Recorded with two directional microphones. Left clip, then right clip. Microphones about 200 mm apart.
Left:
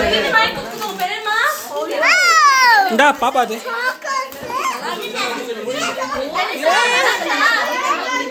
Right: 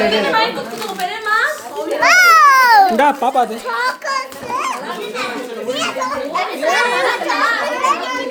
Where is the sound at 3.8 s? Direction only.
20° right (ahead or behind).